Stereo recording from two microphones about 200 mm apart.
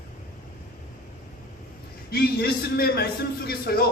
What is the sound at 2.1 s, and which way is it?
A man's voice, 50° left (ahead or behind).